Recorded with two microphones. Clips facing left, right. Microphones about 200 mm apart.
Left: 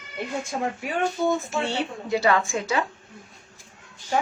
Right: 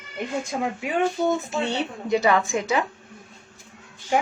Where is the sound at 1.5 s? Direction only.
20° right (ahead or behind).